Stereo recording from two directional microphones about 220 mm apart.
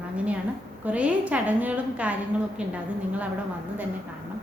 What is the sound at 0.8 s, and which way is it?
A woman's voice, 5° right (ahead or behind).